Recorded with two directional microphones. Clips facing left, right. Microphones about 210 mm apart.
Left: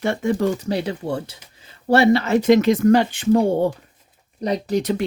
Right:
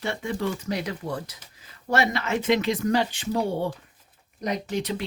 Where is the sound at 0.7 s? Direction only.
30° left (ahead or behind); by 3.6 s 50° left (ahead or behind).